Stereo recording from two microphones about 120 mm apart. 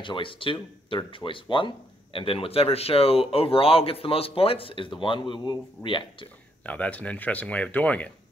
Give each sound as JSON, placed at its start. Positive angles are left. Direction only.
{"t": 0.0, "sound": "speech", "side_deg": 45}
{"t": 6.6, "sound": "speech", "side_deg": 10}